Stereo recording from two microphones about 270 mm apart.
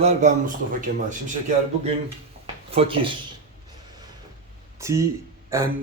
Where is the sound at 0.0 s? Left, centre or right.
Right.